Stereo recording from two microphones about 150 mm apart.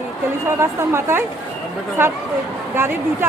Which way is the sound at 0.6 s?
15° right (ahead or behind).